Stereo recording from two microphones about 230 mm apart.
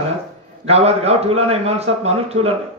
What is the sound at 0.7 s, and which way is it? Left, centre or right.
A man's voice, right.